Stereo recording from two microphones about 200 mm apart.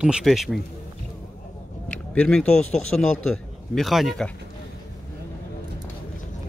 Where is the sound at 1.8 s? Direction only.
5° left (ahead or behind).